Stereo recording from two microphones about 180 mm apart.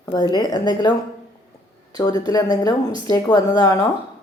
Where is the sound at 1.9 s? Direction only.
20° left (ahead or behind).